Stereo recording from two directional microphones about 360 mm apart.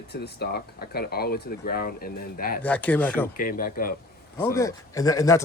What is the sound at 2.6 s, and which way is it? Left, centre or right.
Speech, centre.